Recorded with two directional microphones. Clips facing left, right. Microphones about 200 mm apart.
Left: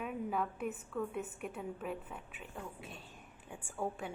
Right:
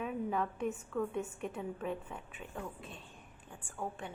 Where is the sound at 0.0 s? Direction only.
5° left (ahead or behind).